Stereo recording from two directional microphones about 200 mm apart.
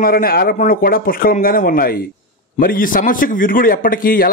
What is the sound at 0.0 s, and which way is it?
A man's voice, 50° left (ahead or behind).